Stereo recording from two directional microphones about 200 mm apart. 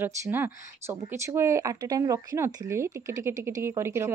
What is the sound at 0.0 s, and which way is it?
Speech, 10° right (ahead or behind).